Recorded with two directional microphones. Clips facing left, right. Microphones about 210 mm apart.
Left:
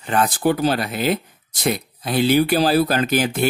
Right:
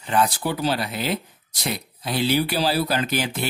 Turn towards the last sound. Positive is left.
turn(degrees=50)  # may be behind; listen again after turning